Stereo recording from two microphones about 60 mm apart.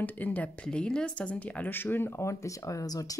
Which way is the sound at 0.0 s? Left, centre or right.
Left.